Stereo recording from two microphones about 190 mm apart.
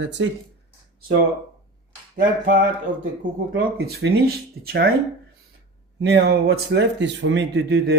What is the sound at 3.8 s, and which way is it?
Speech, 55° right (ahead or behind).